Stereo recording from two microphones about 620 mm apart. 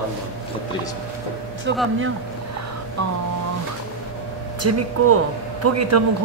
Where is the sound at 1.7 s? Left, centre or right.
Centre.